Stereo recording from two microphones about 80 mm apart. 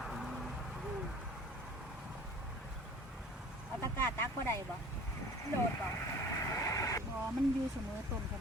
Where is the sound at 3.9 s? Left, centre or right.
Left.